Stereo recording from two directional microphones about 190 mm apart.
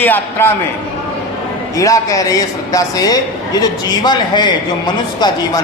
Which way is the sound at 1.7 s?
15° left (ahead or behind).